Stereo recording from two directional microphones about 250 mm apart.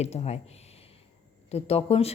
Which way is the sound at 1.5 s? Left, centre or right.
Left.